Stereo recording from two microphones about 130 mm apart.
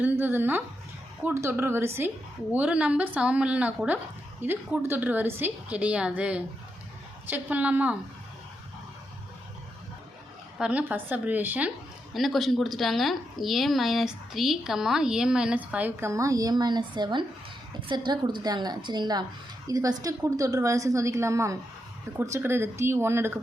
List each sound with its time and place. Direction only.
0.0 s a woman's voice: 15° right (ahead or behind)
10.6 s a woman's voice: 10° right (ahead or behind)
12.1 s a woman's voice: centre (ahead or behind); by 23.4 s 20° right (ahead or behind)